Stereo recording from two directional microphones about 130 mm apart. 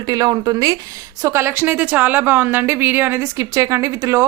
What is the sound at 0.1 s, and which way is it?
A woman's voice, 30° right (ahead or behind).